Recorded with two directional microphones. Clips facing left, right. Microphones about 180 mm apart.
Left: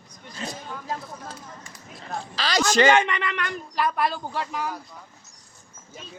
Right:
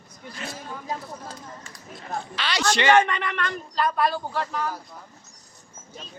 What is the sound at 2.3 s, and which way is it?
Speech, 40° left (ahead or behind).